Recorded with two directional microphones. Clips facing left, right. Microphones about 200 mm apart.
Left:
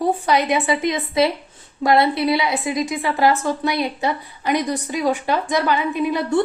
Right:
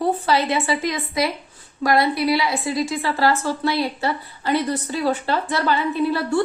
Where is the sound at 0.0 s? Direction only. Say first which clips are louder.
Left 1 dB; 15° left (ahead or behind).